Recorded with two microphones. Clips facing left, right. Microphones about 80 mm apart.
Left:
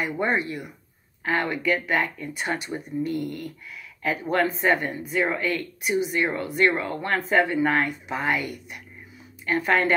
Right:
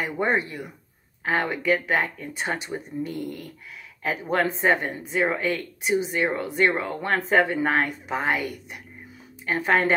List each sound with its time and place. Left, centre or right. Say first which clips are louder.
0.0 s speech: even; right